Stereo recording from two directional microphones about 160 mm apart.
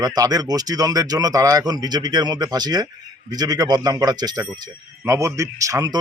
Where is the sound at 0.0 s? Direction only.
25° right (ahead or behind).